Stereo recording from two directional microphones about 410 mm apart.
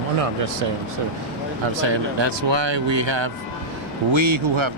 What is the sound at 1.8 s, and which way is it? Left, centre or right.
Speech, right.